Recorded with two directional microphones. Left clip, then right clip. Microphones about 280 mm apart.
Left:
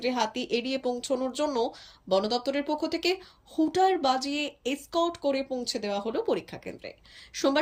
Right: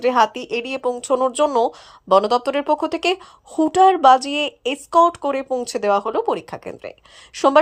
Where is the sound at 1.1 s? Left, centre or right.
Right.